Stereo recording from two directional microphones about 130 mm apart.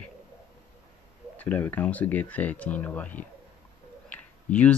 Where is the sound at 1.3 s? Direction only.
15° left (ahead or behind).